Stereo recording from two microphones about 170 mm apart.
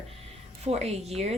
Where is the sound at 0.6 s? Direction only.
40° right (ahead or behind).